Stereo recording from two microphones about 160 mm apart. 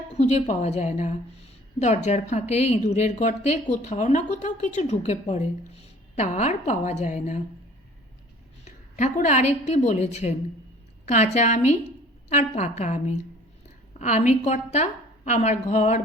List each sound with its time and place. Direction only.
0.1 s a woman's voice: 45° left (ahead or behind)
6.1 s a woman's voice: 45° left (ahead or behind)
8.6 s a woman's voice: 50° left (ahead or behind)